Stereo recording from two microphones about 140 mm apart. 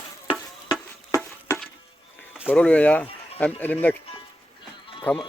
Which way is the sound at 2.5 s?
10° left (ahead or behind).